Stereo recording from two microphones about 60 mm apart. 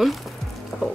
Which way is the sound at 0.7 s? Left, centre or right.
Left.